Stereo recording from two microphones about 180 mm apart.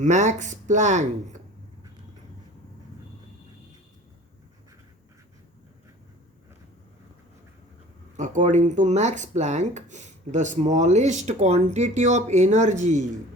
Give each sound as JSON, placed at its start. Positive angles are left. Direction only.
{"t": 0.0, "sound": "speech", "side_deg": -40}
{"t": 8.1, "sound": "speech", "side_deg": -45}